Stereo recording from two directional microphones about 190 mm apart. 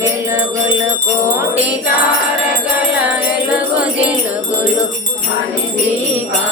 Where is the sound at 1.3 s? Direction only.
10° right (ahead or behind).